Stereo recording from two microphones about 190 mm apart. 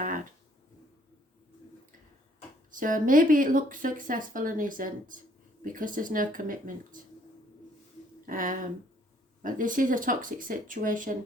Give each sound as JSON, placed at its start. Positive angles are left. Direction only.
{"t": 0.0, "sound": "a sound", "side_deg": -45}
{"t": 2.7, "sound": "speech", "side_deg": -45}
{"t": 8.3, "sound": "speech", "side_deg": -45}